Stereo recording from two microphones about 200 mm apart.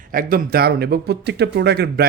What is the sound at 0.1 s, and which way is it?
Speech, 45° right (ahead or behind).